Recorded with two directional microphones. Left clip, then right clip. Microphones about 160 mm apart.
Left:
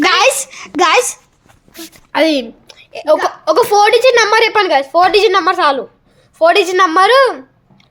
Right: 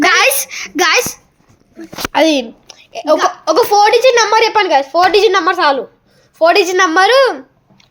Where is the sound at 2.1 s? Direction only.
5° right (ahead or behind).